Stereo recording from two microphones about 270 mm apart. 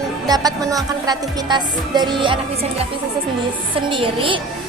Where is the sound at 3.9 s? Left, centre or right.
Centre.